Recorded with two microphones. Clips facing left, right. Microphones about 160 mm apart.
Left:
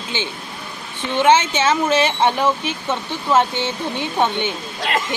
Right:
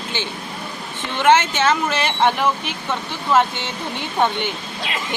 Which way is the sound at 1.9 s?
25° left (ahead or behind).